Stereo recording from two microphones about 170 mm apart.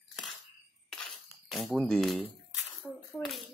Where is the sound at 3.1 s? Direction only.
Centre (ahead or behind).